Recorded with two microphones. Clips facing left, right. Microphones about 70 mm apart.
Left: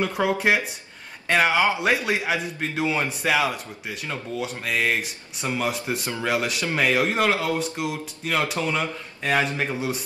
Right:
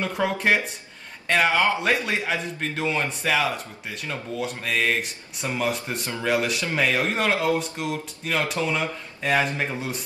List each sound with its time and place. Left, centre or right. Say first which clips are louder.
0.0 s a man's voice: left 2 dB; centre